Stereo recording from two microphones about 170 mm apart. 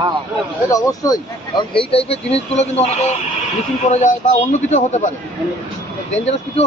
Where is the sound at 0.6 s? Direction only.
20° left (ahead or behind); by 5.1 s 45° left (ahead or behind).